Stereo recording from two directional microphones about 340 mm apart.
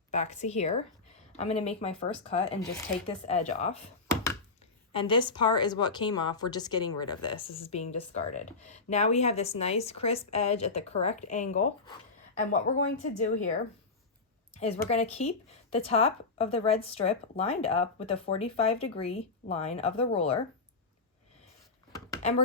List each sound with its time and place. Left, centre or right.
0.1 s speech: centre
4.1 s chopping: centre
4.9 s speech: centre
14.5 s speech: centre
21.9 s a sound: centre